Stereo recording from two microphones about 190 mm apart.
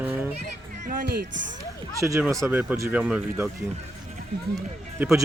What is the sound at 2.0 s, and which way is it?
Speech, 15° right (ahead or behind).